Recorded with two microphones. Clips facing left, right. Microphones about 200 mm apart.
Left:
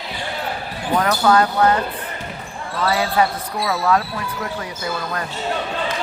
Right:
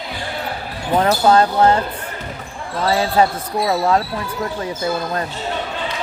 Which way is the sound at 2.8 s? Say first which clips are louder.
Right 3 dB; 30° right (ahead or behind).